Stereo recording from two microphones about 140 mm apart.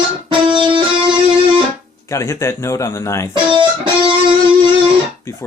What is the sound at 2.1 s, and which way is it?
Speech, 20° left (ahead or behind).